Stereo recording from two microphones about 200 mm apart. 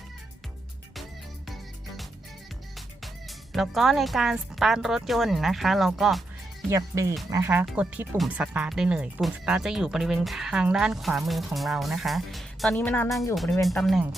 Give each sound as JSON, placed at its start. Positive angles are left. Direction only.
{"t": 2.7, "sound": "speech", "side_deg": 0}
{"t": 6.7, "sound": "speech", "side_deg": -15}